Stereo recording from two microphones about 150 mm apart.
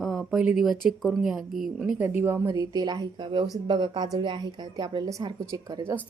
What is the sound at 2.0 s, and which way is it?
A woman's voice, 15° right (ahead or behind).